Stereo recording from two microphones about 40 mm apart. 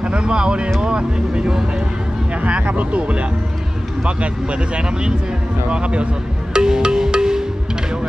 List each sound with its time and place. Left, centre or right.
0.0 s speech: right
2.4 s speech: right
6.5 s music: centre